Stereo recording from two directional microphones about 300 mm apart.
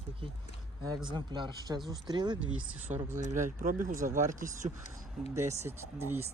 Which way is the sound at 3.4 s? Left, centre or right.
Right.